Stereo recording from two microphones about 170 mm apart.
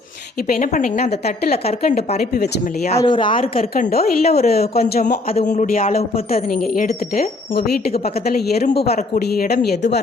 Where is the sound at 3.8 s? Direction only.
60° left (ahead or behind).